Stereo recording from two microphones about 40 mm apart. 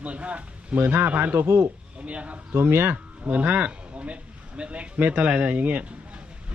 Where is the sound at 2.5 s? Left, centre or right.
Right.